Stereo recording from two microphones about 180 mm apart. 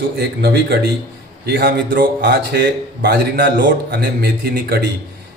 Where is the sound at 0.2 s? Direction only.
65° right (ahead or behind).